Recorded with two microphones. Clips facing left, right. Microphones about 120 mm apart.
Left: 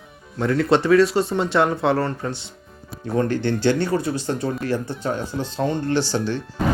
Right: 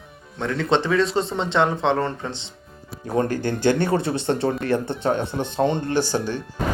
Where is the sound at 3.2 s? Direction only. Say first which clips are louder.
Left 2 dB; 45° right (ahead or behind); by 5.6 s 60° right (ahead or behind).